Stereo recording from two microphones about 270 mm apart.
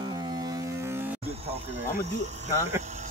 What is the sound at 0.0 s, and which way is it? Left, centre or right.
Ship, centre.